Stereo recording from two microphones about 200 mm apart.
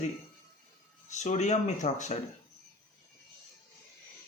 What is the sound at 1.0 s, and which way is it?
Speech, 35° left (ahead or behind).